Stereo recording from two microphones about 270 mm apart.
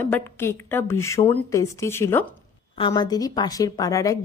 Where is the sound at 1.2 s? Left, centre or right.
Left.